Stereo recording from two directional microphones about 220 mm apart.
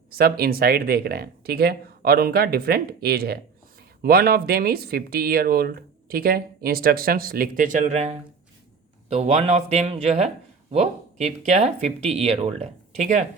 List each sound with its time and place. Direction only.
0.1 s speech: 45° right (ahead or behind)